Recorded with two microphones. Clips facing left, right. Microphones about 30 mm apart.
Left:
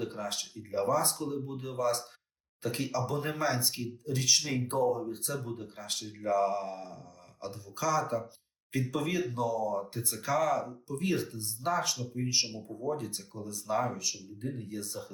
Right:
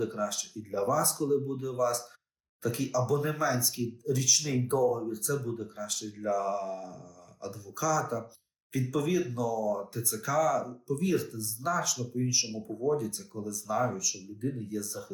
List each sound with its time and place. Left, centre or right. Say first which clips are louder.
0.0 s speech: right 4 dB; left
14.4 s speech: right 4 dB; left
14.7 s speech: right 3 dB; left